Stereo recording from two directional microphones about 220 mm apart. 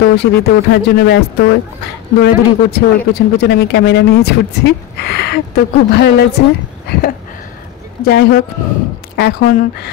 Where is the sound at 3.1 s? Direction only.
45° left (ahead or behind).